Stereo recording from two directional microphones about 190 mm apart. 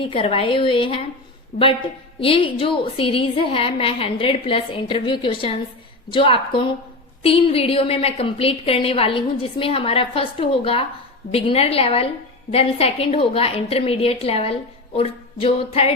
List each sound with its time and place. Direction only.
0.0 s a woman's voice: 30° left (ahead or behind)
1.5 s a woman's voice: 50° left (ahead or behind)
2.2 s a woman's voice: 30° left (ahead or behind)